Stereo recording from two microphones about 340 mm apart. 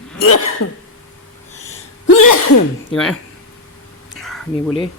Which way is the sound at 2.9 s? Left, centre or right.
Centre.